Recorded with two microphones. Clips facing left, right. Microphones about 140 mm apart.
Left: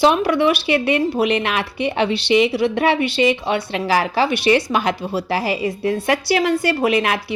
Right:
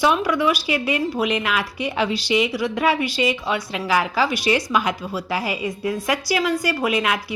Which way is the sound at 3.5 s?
65° left (ahead or behind).